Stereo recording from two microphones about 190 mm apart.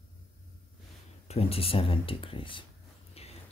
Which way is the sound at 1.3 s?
30° left (ahead or behind).